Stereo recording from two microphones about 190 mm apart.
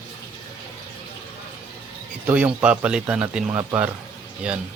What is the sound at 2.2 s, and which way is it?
A man's voice, 5° right (ahead or behind).